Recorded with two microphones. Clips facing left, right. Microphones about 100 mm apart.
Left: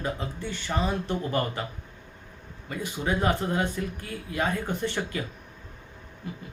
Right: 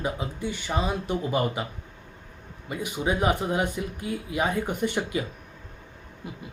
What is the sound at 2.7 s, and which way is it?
Speech, 15° right (ahead or behind).